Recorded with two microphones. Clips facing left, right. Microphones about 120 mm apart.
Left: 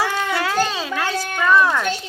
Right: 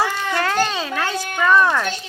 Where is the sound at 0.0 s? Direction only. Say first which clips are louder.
Even; 5° left (ahead or behind).